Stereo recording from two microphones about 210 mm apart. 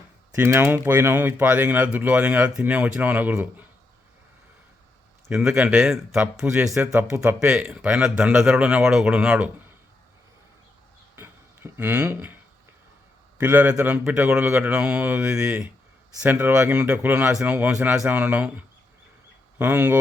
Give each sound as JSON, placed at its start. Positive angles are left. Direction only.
{"t": 0.3, "sound": "speech", "side_deg": -10}
{"t": 5.3, "sound": "speech", "side_deg": -5}
{"t": 11.1, "sound": "a sound", "side_deg": -10}
{"t": 13.4, "sound": "speech", "side_deg": -10}